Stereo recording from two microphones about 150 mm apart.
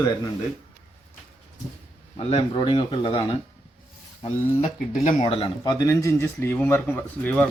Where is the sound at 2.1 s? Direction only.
40° left (ahead or behind).